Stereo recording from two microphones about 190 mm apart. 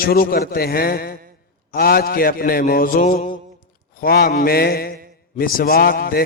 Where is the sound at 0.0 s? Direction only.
50° left (ahead or behind).